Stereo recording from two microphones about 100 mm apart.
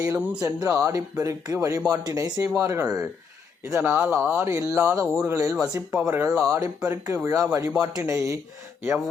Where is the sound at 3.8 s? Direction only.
20° right (ahead or behind).